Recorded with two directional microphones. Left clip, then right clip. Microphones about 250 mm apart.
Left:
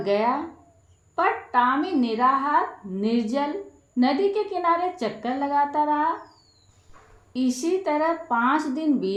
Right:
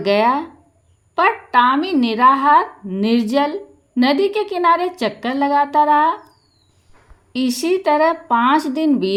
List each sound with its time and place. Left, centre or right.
0.0 s a woman's voice: right
7.3 s a woman's voice: right